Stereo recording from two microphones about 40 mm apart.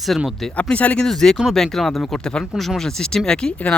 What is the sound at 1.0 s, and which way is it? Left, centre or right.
Speech, centre.